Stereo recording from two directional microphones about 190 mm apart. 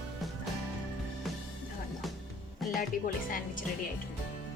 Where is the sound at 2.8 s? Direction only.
45° left (ahead or behind).